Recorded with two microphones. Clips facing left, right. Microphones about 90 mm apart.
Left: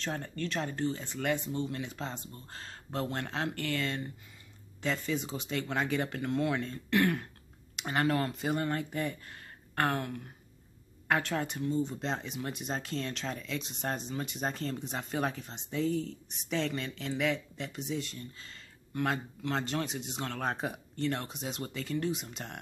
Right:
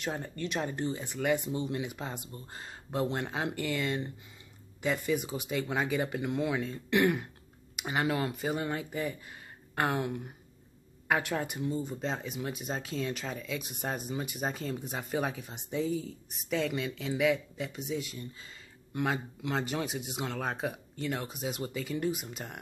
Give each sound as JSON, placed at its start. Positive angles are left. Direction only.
{"t": 0.0, "sound": "speech", "side_deg": -15}
{"t": 11.1, "sound": "speech", "side_deg": -10}